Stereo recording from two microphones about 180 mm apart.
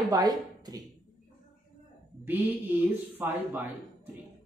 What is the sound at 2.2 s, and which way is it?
Speech, 10° right (ahead or behind).